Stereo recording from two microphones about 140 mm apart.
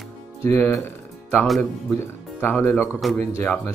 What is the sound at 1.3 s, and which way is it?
Speech, centre (ahead or behind).